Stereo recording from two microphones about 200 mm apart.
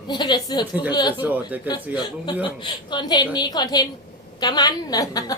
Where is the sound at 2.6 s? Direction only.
25° left (ahead or behind).